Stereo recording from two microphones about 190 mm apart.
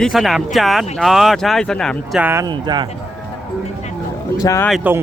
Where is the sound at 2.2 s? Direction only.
15° right (ahead or behind).